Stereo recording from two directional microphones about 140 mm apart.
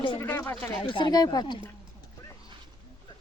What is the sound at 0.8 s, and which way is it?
Speech, 35° left (ahead or behind).